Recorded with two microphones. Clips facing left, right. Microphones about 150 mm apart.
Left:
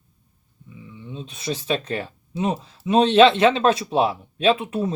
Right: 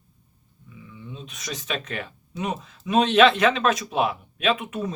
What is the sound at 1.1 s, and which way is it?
Speech, 30° left (ahead or behind).